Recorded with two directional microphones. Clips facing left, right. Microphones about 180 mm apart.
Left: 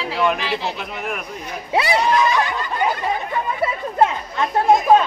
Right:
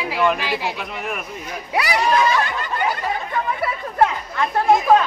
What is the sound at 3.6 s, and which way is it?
Chatter, 20° left (ahead or behind).